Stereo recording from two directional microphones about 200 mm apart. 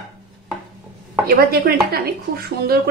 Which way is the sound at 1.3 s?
50° right (ahead or behind).